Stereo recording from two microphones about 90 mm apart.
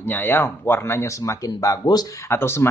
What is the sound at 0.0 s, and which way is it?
Speech, 20° left (ahead or behind).